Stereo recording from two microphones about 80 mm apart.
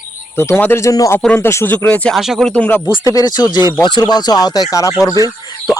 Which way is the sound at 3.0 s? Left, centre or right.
Left.